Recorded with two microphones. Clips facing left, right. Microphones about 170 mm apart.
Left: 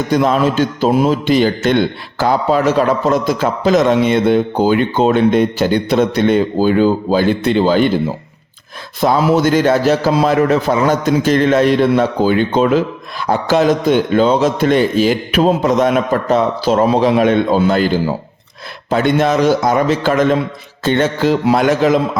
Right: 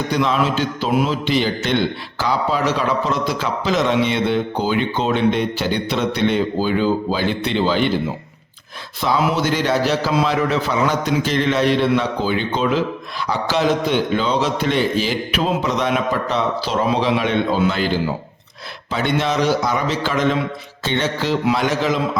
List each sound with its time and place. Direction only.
0.1 s a man's voice: 45° left (ahead or behind)
9.0 s a man's voice: 50° left (ahead or behind)